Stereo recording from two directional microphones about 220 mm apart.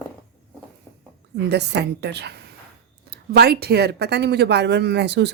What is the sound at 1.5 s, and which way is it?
Speech, 50° right (ahead or behind).